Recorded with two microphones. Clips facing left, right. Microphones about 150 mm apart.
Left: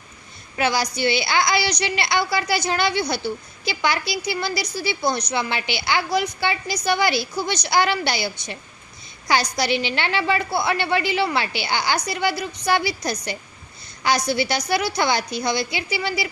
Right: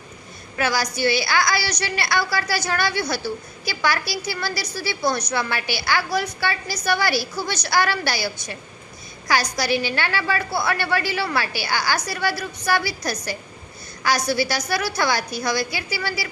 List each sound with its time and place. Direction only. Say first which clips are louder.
0.5 s a woman's voice: left 1 dB; 20° left (ahead or behind)